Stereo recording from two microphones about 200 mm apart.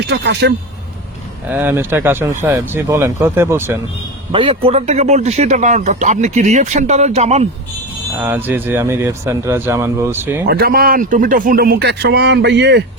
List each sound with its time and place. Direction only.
0.1 s speech: 55° right (ahead or behind)
1.5 s speech: 10° right (ahead or behind)
4.3 s a man's voice: 25° right (ahead or behind)
8.2 s speech: 10° right (ahead or behind)
10.4 s speech: 50° right (ahead or behind)